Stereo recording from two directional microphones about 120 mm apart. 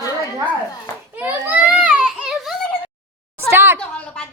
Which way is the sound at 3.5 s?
20° right (ahead or behind).